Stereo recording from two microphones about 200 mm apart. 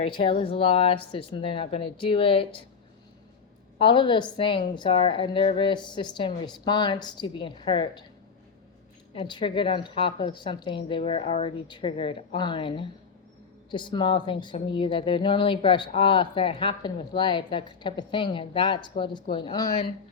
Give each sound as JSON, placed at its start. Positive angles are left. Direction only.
{"t": 0.0, "sound": "a woman's voice", "side_deg": 25}
{"t": 3.8, "sound": "a woman's voice", "side_deg": 25}
{"t": 9.1, "sound": "a woman's voice", "side_deg": 25}